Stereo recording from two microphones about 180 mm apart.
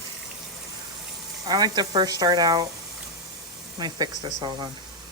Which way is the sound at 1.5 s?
20° right (ahead or behind).